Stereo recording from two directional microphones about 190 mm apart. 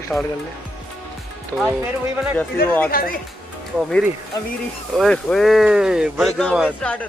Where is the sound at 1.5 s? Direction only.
10° left (ahead or behind).